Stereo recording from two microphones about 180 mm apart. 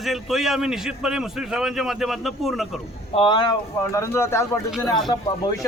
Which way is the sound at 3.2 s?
25° left (ahead or behind).